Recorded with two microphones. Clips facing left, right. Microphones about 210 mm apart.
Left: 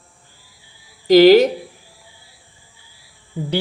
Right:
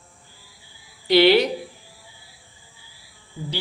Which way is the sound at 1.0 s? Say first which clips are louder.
Left 7 dB; 40° left (ahead or behind).